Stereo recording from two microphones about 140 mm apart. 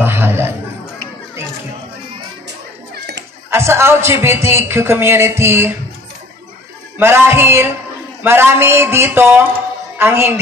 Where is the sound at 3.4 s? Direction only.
20° right (ahead or behind).